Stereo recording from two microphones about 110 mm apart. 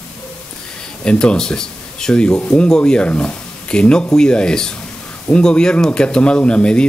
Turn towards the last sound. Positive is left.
turn(degrees=10)  # may be behind; listen again after turning